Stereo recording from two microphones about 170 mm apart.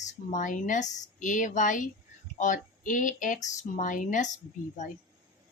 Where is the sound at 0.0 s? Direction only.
45° left (ahead or behind).